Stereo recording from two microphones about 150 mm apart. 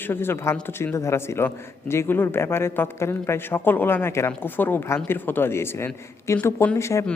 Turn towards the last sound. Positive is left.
turn(degrees=20)  # may be behind; listen again after turning